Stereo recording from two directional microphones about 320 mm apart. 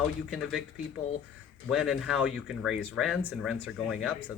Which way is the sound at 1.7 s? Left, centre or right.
Centre.